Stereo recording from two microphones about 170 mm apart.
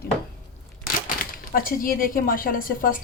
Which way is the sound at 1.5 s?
55° left (ahead or behind).